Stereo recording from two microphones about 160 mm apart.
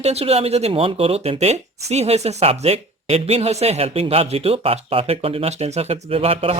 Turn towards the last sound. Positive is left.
turn(degrees=-35)  # may be behind; listen again after turning